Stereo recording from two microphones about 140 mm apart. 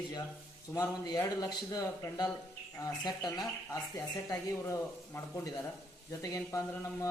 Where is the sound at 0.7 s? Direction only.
25° left (ahead or behind).